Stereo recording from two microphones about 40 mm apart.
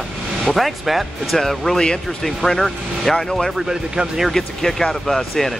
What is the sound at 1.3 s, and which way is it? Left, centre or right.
Speech, centre.